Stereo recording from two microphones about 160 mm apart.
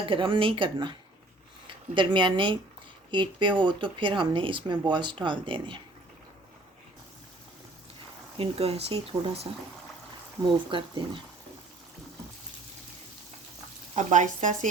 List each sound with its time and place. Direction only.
0.0 s speech: 30° right (ahead or behind)
8.4 s speech: 35° right (ahead or behind)
10.7 s speech: 30° right (ahead or behind)
13.9 s speech: 50° right (ahead or behind)